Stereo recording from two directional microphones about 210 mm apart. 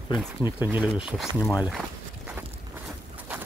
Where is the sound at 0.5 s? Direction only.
10° right (ahead or behind).